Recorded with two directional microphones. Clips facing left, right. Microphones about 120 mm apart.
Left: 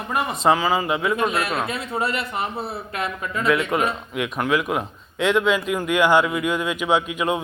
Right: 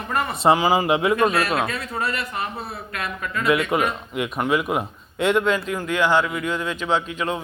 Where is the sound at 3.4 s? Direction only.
Centre (ahead or behind).